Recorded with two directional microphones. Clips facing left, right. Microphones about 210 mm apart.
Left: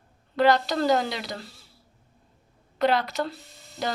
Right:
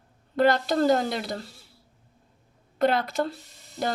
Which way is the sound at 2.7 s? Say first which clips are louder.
Even; 50° right (ahead or behind).